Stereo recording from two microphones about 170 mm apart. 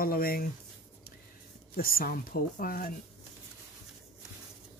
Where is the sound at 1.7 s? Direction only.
60° left (ahead or behind).